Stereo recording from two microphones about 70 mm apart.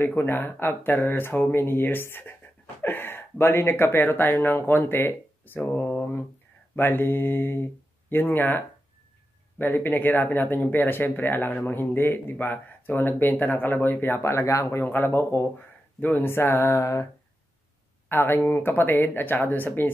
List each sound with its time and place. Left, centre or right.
0.0 s speech: left
6.7 s mantra: left
9.6 s speech: left
14.8 s speech: left
18.0 s speech: left